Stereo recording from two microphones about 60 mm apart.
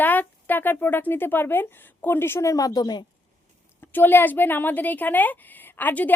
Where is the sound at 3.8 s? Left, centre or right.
Left.